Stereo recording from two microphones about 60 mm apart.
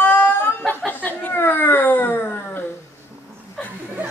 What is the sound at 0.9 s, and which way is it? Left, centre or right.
Speech, left.